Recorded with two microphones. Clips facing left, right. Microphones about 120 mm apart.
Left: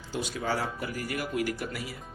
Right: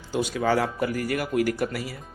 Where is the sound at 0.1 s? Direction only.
75° right (ahead or behind); by 1.8 s 55° right (ahead or behind).